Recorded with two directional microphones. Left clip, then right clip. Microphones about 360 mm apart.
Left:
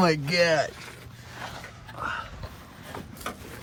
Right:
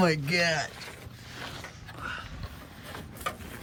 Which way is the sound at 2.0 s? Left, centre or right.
Centre.